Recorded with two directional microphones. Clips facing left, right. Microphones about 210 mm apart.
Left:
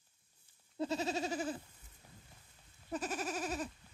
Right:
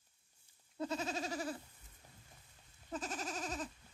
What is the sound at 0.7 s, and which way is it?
Goat, 30° left (ahead or behind).